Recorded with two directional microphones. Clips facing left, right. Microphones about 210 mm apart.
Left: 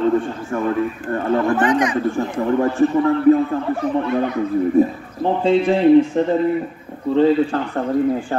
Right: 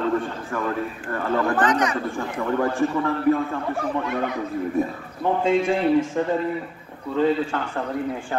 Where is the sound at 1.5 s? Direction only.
10° left (ahead or behind).